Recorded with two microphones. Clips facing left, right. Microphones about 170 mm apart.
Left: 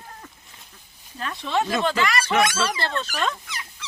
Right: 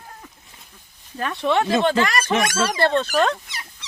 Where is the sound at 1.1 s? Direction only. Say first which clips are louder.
Right 5 dB; 75° right (ahead or behind).